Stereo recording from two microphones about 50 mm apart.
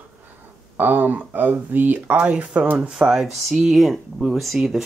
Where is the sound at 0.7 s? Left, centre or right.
Right.